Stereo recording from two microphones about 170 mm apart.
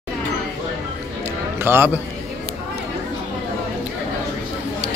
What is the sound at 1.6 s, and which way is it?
Speech, 10° right (ahead or behind).